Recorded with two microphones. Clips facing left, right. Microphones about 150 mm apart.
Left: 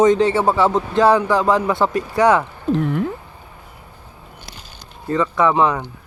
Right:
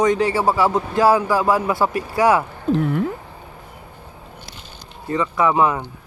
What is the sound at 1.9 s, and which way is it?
Speech, 20° left (ahead or behind).